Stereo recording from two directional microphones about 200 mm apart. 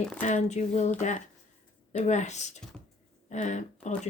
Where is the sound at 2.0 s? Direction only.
35° left (ahead or behind).